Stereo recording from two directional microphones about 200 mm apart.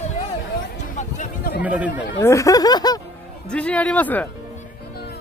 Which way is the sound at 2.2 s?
15° left (ahead or behind).